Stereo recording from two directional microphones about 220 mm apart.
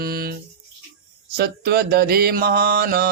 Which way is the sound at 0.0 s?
45° right (ahead or behind).